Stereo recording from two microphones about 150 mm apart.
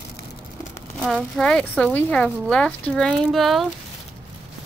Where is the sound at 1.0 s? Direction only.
5° left (ahead or behind).